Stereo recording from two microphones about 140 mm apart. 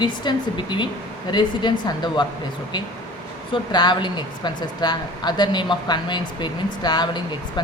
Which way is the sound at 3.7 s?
30° left (ahead or behind).